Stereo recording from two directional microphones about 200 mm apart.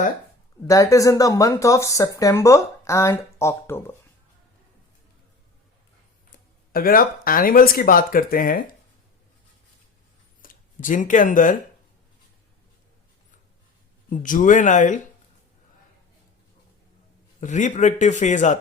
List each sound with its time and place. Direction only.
0.7 s speech: 15° left (ahead or behind)
6.7 s speech: 45° left (ahead or behind)
10.4 s speech: 40° left (ahead or behind)
14.1 s a man's voice: 40° left (ahead or behind)
17.4 s a man's voice: 40° left (ahead or behind)